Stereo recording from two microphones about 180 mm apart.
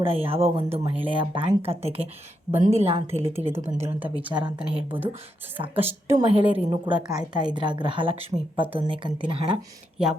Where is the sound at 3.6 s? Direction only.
35° right (ahead or behind).